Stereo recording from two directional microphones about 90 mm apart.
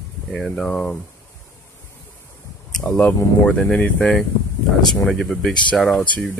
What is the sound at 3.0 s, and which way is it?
Speech, 10° left (ahead or behind).